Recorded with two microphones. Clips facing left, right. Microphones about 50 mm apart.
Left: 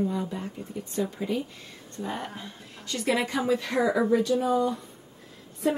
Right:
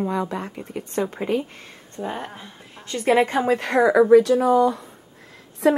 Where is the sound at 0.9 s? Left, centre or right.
Right.